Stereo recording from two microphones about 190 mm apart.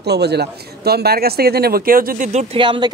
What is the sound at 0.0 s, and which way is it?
Speech, 60° right (ahead or behind).